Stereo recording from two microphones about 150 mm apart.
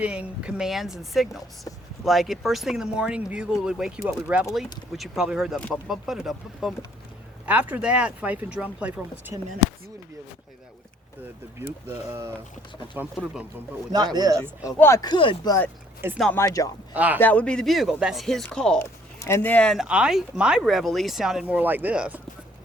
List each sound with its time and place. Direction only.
0.0 s speech: 10° right (ahead or behind)
5.5 s speech: 10° left (ahead or behind)
5.9 s speech: centre (ahead or behind)
11.6 s speech: 15° right (ahead or behind)
13.1 s speech: 5° right (ahead or behind)
13.9 s speech: 25° right (ahead or behind)
14.6 s speech: 20° left (ahead or behind)
15.0 s speech: 35° left (ahead or behind)
16.3 s speech: 20° left (ahead or behind)
16.9 s speech: 10° right (ahead or behind)
17.2 s speech: 10° left (ahead or behind)
18.8 s speech: 15° left (ahead or behind); by 22.2 s 10° right (ahead or behind)